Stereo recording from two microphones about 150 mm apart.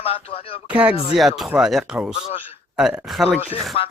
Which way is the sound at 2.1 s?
35° left (ahead or behind).